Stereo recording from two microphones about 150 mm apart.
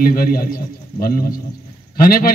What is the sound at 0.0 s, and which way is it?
A man's voice, 75° left (ahead or behind).